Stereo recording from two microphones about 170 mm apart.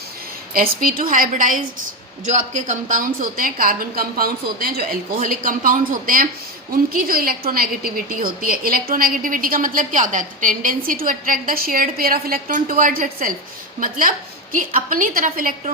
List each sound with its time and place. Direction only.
0.5 s a woman's voice: 55° right (ahead or behind)